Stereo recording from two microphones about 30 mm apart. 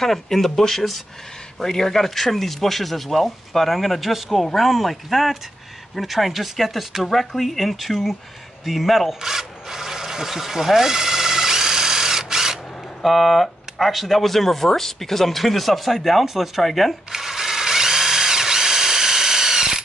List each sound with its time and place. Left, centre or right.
0.0 s speech: centre
9.2 s a sound: centre
13.0 s speech: centre
17.1 s drill: centre